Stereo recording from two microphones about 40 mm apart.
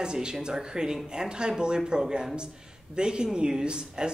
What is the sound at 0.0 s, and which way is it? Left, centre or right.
Speech, right.